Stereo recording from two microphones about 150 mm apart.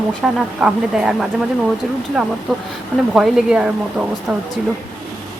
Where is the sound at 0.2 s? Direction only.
5° right (ahead or behind).